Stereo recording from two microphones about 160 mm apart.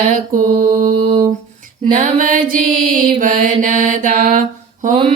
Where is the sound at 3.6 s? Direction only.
55° right (ahead or behind).